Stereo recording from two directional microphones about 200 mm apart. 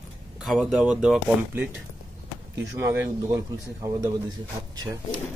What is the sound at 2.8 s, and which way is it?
A man's voice, 15° right (ahead or behind).